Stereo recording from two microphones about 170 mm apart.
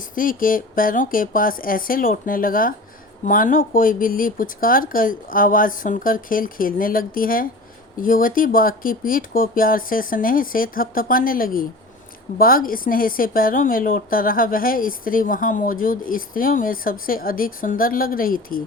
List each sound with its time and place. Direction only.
0.1 s speech: 55° left (ahead or behind)